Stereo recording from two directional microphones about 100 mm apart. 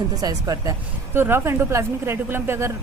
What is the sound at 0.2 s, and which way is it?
Speech, 40° right (ahead or behind).